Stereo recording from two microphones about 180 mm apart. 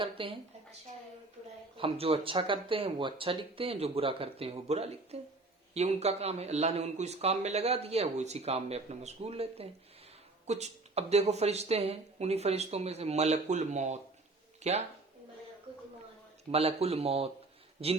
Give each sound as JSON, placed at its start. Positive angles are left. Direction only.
{"t": 0.0, "sound": "a woman's voice", "side_deg": -30}
{"t": 1.7, "sound": "speech", "side_deg": -30}
{"t": 16.5, "sound": "speech", "side_deg": -35}